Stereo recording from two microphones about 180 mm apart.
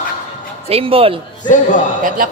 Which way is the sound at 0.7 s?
30° right (ahead or behind).